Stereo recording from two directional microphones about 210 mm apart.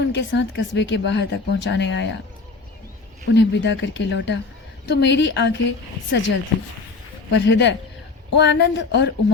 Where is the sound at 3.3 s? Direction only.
60° left (ahead or behind).